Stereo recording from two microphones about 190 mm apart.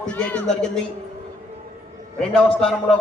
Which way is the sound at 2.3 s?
5° left (ahead or behind).